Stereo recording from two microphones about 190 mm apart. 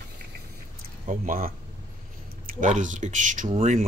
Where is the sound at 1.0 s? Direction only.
45° right (ahead or behind).